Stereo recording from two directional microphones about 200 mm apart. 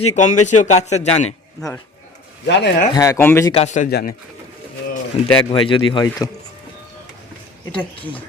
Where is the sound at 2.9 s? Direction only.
15° left (ahead or behind).